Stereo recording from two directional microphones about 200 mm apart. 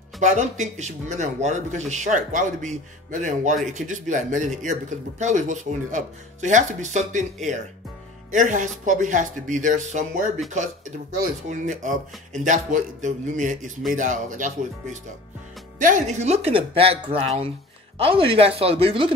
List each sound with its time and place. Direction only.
0.2 s speech: 35° right (ahead or behind)
8.3 s speech: 40° right (ahead or behind)
11.4 s speech: 40° right (ahead or behind)